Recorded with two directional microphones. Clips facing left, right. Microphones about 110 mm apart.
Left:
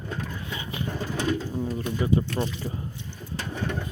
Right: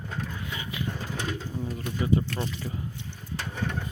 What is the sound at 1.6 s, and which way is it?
Speech, 30° left (ahead or behind).